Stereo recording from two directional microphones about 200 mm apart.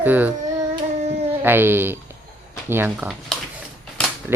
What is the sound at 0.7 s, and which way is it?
Child singing, 30° right (ahead or behind).